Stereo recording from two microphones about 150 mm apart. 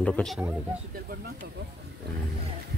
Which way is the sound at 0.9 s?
75° right (ahead or behind).